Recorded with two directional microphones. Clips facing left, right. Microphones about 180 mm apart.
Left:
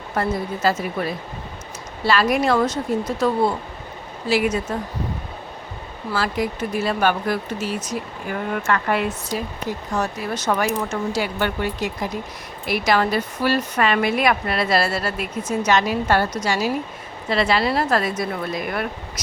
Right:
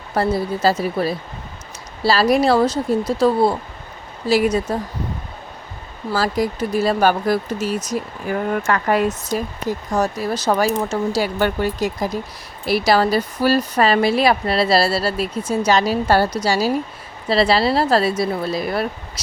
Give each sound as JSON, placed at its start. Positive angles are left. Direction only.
{"t": 0.1, "sound": "speech", "side_deg": -35}
{"t": 6.1, "sound": "speech", "side_deg": -40}